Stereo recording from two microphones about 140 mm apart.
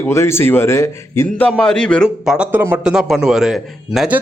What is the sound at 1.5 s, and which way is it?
Speech, 5° left (ahead or behind).